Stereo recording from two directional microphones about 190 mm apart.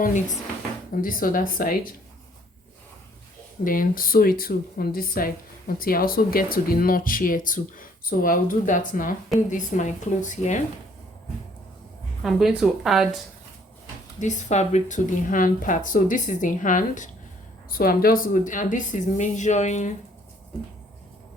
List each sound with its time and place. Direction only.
0.0 s a woman's voice: 40° left (ahead or behind)
3.6 s a woman's voice: 45° left (ahead or behind)
12.2 s a woman's voice: centre (ahead or behind)
14.2 s speech: 40° left (ahead or behind)